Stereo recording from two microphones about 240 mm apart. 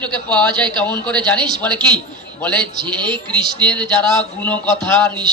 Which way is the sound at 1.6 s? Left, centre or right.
Centre.